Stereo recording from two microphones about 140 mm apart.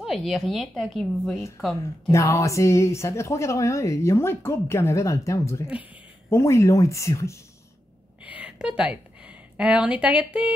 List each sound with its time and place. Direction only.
0.0 s a woman's voice: centre (ahead or behind)
2.0 s a woman's voice: 20° left (ahead or behind)
8.2 s a woman's voice: 10° right (ahead or behind)